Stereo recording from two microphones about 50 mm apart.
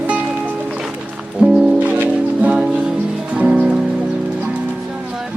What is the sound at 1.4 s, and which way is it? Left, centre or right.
Music, centre.